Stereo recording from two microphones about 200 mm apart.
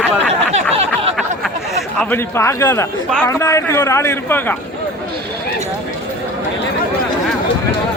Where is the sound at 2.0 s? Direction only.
10° left (ahead or behind).